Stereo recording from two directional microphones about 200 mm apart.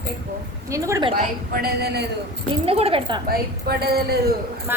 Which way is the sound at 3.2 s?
50° right (ahead or behind).